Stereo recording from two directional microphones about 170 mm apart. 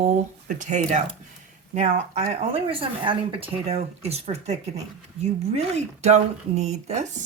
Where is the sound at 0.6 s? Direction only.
45° right (ahead or behind).